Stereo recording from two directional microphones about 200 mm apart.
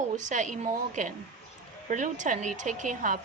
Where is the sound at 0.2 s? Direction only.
40° right (ahead or behind).